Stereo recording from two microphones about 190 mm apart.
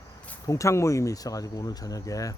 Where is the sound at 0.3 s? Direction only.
15° left (ahead or behind).